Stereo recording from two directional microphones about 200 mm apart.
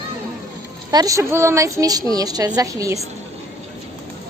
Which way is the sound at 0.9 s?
15° right (ahead or behind).